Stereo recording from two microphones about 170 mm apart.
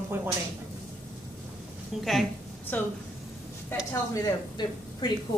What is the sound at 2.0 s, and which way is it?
Speech, centre (ahead or behind).